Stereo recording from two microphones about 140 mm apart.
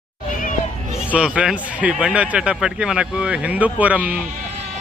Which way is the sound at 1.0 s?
10° right (ahead or behind).